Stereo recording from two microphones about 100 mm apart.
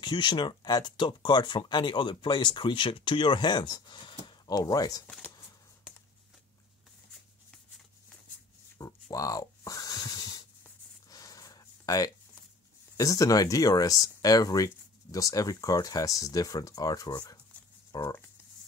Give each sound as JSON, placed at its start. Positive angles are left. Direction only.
{"t": 0.0, "sound": "speech", "side_deg": 50}
{"t": 8.8, "sound": "a sound", "side_deg": 40}
{"t": 12.9, "sound": "speech", "side_deg": 35}